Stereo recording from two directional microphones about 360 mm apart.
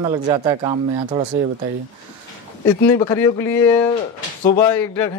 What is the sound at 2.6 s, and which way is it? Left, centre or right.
Speech, centre.